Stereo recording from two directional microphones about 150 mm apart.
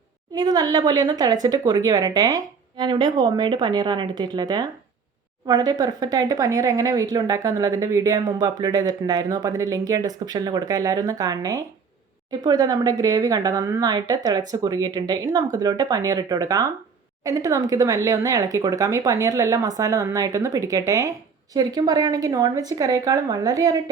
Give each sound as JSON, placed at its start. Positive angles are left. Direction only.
{"t": 0.3, "sound": "speech", "side_deg": -25}